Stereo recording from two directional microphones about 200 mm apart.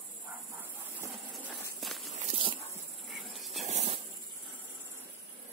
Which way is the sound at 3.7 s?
35° right (ahead or behind).